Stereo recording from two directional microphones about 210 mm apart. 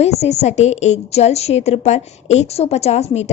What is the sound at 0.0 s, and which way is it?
A woman's voice, 30° left (ahead or behind).